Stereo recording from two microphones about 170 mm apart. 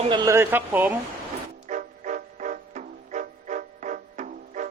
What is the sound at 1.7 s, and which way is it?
Music, 45° right (ahead or behind).